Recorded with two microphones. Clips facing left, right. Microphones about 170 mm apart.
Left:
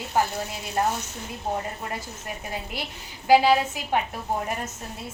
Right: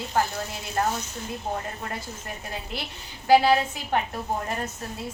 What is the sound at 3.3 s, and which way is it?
Speech, 10° left (ahead or behind).